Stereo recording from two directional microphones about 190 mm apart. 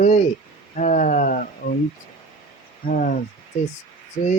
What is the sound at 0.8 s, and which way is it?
Speech, 45° left (ahead or behind).